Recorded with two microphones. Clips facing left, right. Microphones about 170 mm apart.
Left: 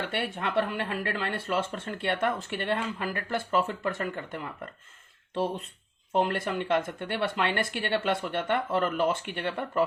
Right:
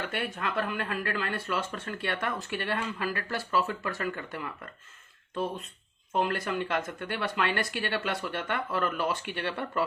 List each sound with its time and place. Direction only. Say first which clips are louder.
0.3 s speech: left 5 dB; 25° left (ahead or behind)
6.1 s speech: left 2 dB; 25° left (ahead or behind)